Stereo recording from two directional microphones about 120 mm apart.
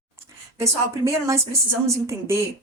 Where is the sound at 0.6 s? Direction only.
25° right (ahead or behind).